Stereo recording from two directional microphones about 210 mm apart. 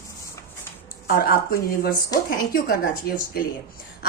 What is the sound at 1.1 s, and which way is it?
A woman's voice, 45° left (ahead or behind).